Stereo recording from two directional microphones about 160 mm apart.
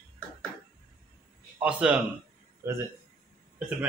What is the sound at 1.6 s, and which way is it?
Speech, 5° right (ahead or behind).